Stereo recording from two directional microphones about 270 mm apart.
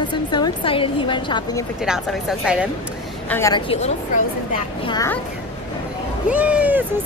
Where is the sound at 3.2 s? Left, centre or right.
Centre.